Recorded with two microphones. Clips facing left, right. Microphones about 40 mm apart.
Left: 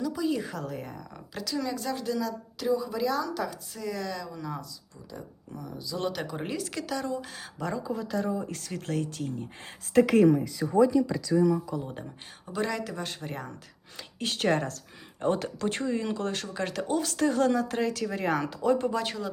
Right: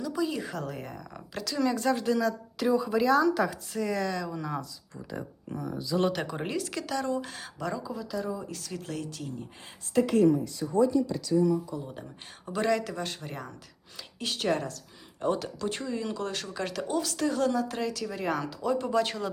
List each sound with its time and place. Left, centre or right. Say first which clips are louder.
0.0 s speech: left 1 dB; centre
3.9 s speech: right 4 dB; centre
5.5 s speech: right 6 dB; right
6.2 s speech: right 1 dB; centre
6.5 s speech: right 1 dB; centre
7.6 s speech: left 2 dB; left
9.9 s a woman's voice: left 3 dB; left
10.6 s speech: left 2 dB; left
11.7 s speech: left 3 dB; left
12.5 s speech: right 3 dB; centre
14.2 s speech: left 2 dB; left
18.9 s speech: right 2 dB; centre